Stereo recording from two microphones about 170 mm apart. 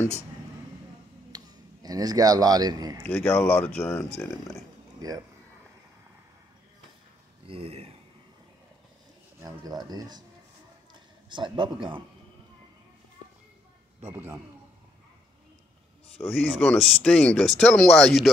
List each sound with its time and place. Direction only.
1.3 s speech: 20° right (ahead or behind)
3.1 s speech: 10° left (ahead or behind)
5.0 s speech: 20° right (ahead or behind)
7.4 s speech: 35° right (ahead or behind)
9.4 s speech: 20° right (ahead or behind)
10.9 s a sound: 30° right (ahead or behind)
14.0 s a man's voice: 15° right (ahead or behind)
16.3 s speech: centre (ahead or behind)